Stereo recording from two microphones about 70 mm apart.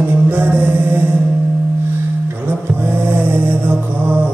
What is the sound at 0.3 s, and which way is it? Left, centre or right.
Music, right.